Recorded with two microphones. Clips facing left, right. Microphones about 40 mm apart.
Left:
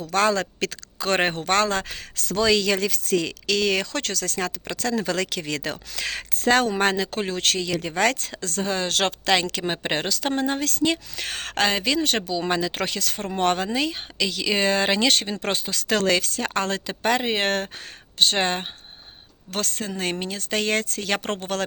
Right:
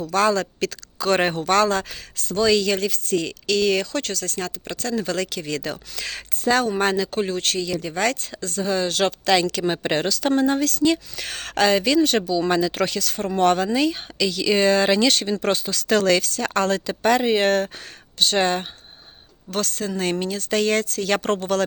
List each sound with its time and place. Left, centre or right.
0.1 s a woman's voice: left
2.3 s speech: left
3.8 s speech: left
6.7 s speech: left
7.1 s speech: left
7.8 s speech: left
8.3 s speech: left
9.2 s a woman's voice: left
12.5 s a woman's voice: left
19.9 s speech: centre